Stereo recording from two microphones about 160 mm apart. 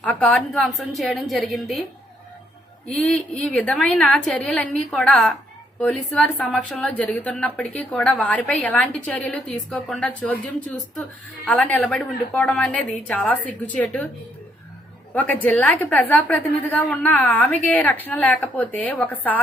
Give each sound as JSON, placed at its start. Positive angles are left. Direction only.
{"t": 0.0, "sound": "a woman's voice", "side_deg": 10}
{"t": 2.9, "sound": "a woman's voice", "side_deg": 5}
{"t": 15.1, "sound": "a woman's voice", "side_deg": 10}